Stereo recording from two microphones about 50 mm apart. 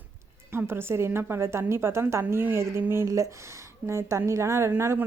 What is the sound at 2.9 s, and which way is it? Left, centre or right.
Speech, right.